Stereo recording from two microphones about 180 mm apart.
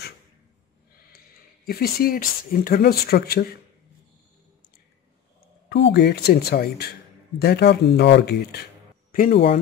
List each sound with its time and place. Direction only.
1.7 s speech: 60° left (ahead or behind)
5.7 s speech: 70° left (ahead or behind)
9.1 s speech: 55° left (ahead or behind)